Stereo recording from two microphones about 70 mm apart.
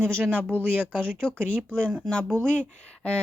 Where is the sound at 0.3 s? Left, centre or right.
Right.